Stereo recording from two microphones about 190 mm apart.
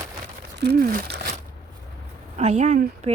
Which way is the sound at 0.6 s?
55° right (ahead or behind).